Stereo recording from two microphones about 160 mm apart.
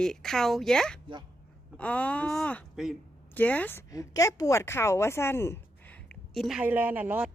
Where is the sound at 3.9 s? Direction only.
20° left (ahead or behind).